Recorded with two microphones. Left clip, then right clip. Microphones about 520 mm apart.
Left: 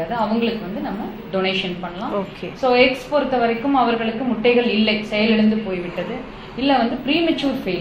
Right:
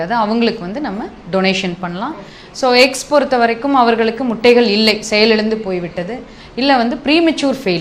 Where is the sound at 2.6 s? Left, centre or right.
Right.